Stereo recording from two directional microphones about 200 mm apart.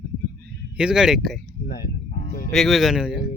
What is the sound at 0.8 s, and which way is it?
Speech, 5° right (ahead or behind).